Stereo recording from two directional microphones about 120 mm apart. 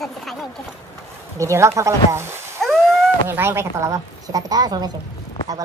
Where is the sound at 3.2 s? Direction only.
20° right (ahead or behind); by 4.9 s 35° right (ahead or behind).